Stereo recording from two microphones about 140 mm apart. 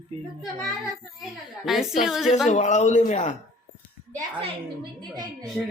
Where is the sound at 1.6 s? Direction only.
Centre (ahead or behind).